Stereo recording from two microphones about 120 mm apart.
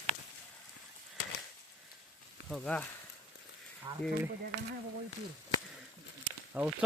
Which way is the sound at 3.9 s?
40° right (ahead or behind).